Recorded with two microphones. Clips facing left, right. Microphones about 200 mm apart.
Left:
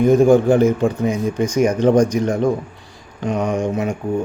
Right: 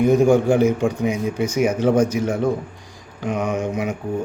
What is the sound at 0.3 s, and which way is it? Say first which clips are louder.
Speech: left 3 dB; 10° right (ahead or behind).